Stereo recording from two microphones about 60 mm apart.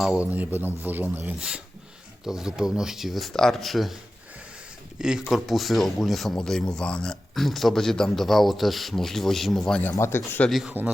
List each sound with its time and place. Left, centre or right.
0.1 s speech: right
0.5 s a man's voice: right
1.4 s speech: centre
4.9 s speech: centre
5.3 s speech: centre
10.0 s speech: left
10.5 s speech: centre